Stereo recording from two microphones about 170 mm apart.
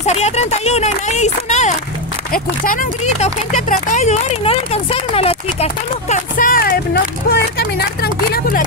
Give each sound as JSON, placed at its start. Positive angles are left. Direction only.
{"t": 0.0, "sound": "speech", "side_deg": 40}
{"t": 2.3, "sound": "speech", "side_deg": 55}